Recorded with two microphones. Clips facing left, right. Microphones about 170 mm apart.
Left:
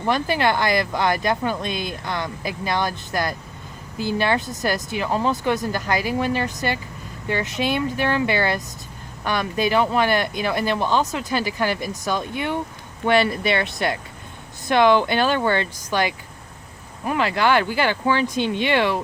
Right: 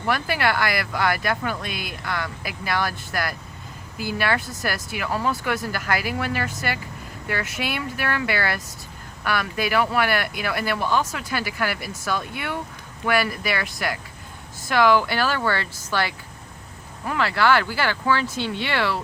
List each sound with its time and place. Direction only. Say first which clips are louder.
0.0 s speech: left 3 dB; 20° left (ahead or behind)